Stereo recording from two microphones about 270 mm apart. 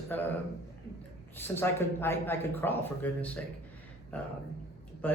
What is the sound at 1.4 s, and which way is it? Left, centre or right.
A man's voice, centre.